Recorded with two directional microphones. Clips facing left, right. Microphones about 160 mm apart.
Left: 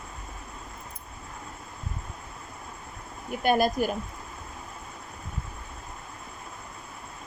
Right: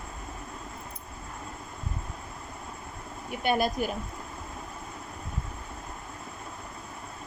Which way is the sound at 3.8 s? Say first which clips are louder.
Left 3 dB; 45° left (ahead or behind).